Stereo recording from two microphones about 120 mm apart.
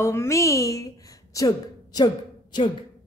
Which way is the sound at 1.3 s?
30° left (ahead or behind).